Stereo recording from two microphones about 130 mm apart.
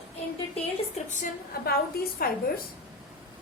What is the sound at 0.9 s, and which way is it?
Speech, 70° left (ahead or behind).